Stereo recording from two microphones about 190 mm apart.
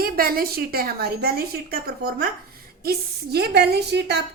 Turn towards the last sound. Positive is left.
turn(degrees=-60)  # may be behind; listen again after turning